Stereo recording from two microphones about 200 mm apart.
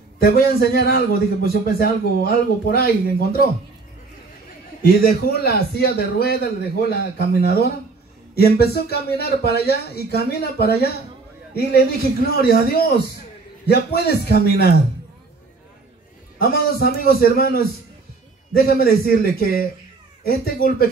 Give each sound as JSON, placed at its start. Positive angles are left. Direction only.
{"t": 0.2, "sound": "speech", "side_deg": 50}
{"t": 4.8, "sound": "speech", "side_deg": 50}
{"t": 16.3, "sound": "speech", "side_deg": 50}